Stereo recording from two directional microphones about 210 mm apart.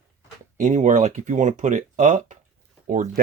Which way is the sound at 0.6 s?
35° right (ahead or behind).